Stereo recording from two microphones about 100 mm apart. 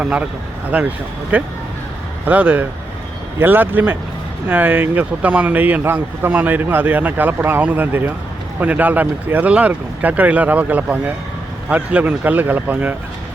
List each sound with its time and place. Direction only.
0.0 s speech: 15° right (ahead or behind)